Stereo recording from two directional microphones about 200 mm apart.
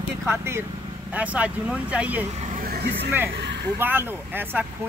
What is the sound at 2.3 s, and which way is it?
Speech, 35° right (ahead or behind).